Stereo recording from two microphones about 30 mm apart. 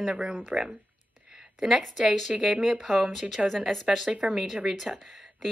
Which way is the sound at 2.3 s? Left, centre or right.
Right.